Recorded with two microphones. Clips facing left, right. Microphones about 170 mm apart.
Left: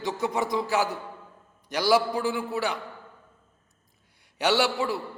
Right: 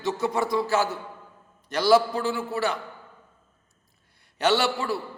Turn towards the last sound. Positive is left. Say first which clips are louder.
# even
turn(degrees=15)  # may be behind; listen again after turning